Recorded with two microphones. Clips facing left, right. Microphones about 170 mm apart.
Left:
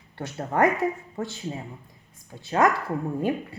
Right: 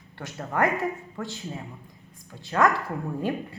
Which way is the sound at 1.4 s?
20° left (ahead or behind).